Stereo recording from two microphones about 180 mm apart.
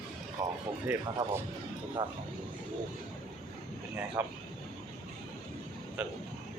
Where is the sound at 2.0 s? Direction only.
25° right (ahead or behind).